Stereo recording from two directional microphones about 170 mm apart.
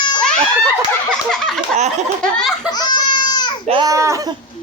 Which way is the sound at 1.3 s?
5° left (ahead or behind).